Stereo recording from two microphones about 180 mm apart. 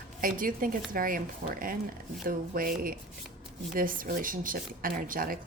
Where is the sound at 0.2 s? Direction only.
50° right (ahead or behind).